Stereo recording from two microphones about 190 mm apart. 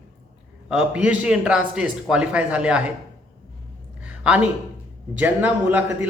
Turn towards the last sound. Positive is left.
turn(degrees=-10)  # may be behind; listen again after turning